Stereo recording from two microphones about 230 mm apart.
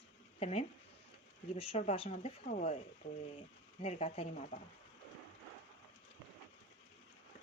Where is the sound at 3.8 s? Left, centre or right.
Left.